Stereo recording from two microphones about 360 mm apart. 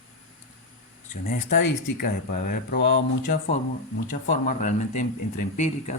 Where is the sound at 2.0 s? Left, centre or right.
Left.